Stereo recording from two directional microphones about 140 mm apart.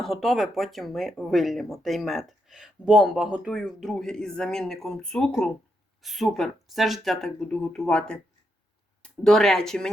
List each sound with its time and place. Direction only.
0.0 s speech: centre (ahead or behind)